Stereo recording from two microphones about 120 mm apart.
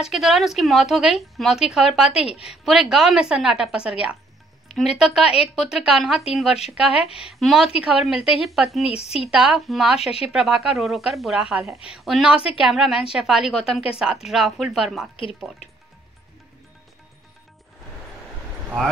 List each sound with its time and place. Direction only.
0.0 s a woman's voice: centre (ahead or behind)
8.8 s speech: 55° left (ahead or behind)
9.3 s a woman's voice: 5° right (ahead or behind)